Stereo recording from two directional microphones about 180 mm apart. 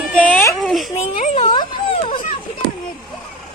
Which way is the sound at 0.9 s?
35° left (ahead or behind).